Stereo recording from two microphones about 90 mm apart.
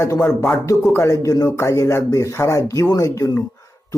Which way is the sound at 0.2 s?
10° left (ahead or behind).